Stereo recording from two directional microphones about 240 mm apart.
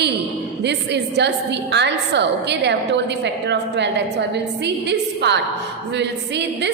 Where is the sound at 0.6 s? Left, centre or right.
Right.